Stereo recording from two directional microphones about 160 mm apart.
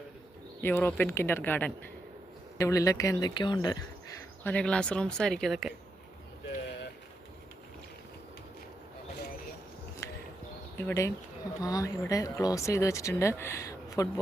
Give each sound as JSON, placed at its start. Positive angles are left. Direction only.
{"t": 0.6, "sound": "speech", "side_deg": 10}
{"t": 4.4, "sound": "speech", "side_deg": 5}
{"t": 10.0, "sound": "a sound", "side_deg": 20}
{"t": 10.8, "sound": "speech", "side_deg": 15}